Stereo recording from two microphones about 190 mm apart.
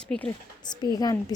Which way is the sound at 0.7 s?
20° left (ahead or behind).